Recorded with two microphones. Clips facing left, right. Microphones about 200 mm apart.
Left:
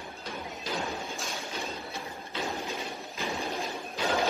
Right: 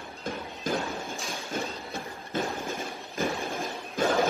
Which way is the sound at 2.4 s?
50° right (ahead or behind).